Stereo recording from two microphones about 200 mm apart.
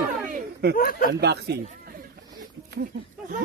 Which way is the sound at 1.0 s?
55° right (ahead or behind).